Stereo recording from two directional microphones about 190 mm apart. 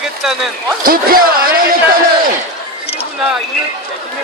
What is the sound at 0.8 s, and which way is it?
Speech, 50° right (ahead or behind).